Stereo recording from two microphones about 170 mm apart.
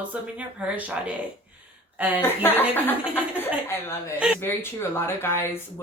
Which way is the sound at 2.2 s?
15° left (ahead or behind).